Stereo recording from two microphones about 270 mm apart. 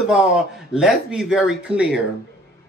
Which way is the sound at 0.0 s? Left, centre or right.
Centre.